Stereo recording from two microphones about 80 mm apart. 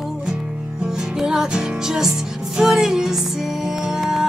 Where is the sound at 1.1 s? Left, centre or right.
Centre.